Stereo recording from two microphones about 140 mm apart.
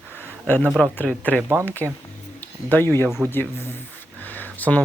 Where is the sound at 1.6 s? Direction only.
10° left (ahead or behind).